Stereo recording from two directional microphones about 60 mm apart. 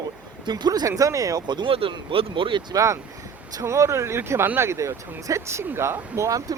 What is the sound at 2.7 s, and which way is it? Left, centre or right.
Speech, right.